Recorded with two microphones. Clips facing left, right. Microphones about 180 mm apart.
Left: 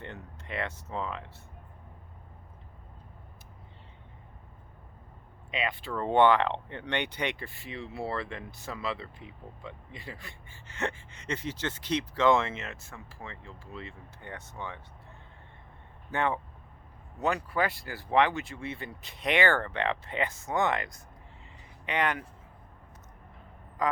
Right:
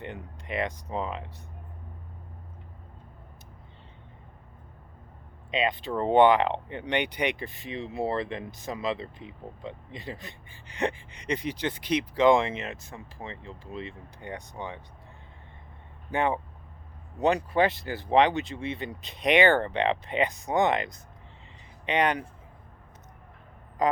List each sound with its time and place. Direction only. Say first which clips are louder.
0.0 s speech: right 4 dB; 15° right (ahead or behind)
5.5 s speech: right 5 dB; 20° right (ahead or behind)
16.1 s speech: right 3 dB; 15° right (ahead or behind)